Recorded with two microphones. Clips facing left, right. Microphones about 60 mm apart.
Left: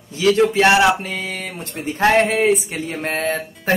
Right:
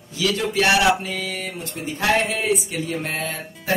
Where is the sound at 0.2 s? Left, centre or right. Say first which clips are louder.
Left 7 dB; left.